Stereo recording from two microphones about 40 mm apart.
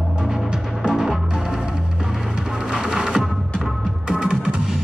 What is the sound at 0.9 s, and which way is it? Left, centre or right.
Music, centre.